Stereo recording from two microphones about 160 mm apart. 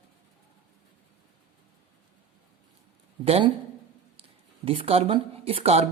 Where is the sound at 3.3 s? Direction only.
40° right (ahead or behind).